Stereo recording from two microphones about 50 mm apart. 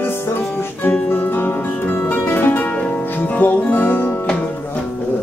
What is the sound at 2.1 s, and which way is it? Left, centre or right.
Music, left.